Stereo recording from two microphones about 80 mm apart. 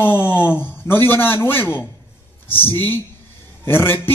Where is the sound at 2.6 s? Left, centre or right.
Left.